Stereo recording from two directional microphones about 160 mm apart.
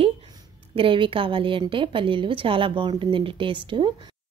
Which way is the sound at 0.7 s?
30° right (ahead or behind).